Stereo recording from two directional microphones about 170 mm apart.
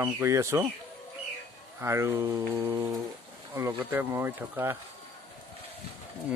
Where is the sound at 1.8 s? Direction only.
15° right (ahead or behind).